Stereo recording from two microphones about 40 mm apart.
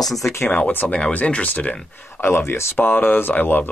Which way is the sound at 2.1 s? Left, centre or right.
Left.